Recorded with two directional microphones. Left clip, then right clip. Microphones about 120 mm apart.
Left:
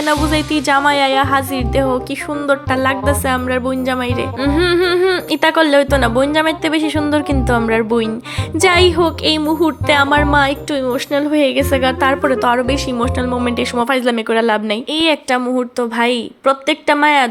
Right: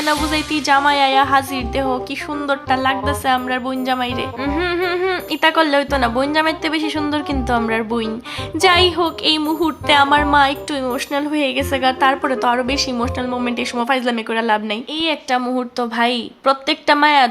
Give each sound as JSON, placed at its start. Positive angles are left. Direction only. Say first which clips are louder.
{"t": 0.0, "sound": "music", "louder": "left 3 dB", "side_deg": 30}
{"t": 2.5, "sound": "a woman's voice", "louder": "left 2 dB", "side_deg": 40}
{"t": 15.4, "sound": "music", "louder": "left 3 dB", "side_deg": 20}